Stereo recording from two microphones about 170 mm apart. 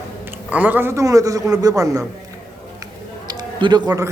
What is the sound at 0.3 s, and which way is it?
A man's voice, 10° right (ahead or behind).